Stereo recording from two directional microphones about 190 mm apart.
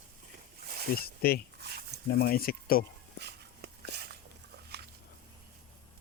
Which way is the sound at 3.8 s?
60° right (ahead or behind).